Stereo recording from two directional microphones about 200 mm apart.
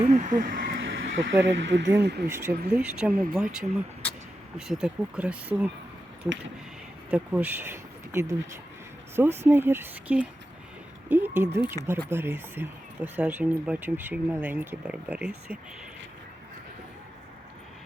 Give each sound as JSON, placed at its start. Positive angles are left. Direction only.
{"t": 0.0, "sound": "speech", "side_deg": -35}
{"t": 0.7, "sound": "a sound", "side_deg": -75}
{"t": 1.5, "sound": "speech", "side_deg": -65}
{"t": 2.2, "sound": "speech", "side_deg": -5}
{"t": 7.1, "sound": "speech", "side_deg": -10}